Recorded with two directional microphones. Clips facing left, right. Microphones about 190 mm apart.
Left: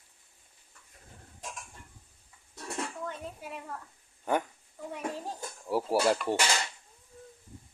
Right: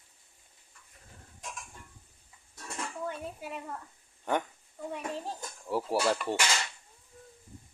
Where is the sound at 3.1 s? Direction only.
5° right (ahead or behind).